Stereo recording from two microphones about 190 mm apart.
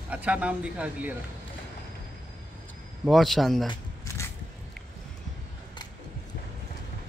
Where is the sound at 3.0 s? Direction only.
Centre (ahead or behind).